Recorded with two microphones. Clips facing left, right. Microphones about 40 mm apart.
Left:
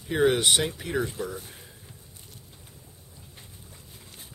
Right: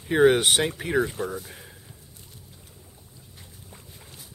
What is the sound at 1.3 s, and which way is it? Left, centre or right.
Speech, right.